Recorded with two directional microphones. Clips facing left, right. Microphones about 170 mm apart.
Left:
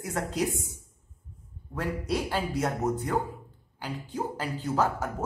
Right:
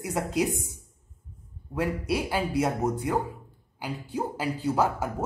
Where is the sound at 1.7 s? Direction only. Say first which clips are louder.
Right 2 dB; 10° right (ahead or behind).